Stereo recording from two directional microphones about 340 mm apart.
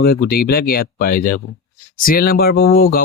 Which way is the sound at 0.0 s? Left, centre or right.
Left.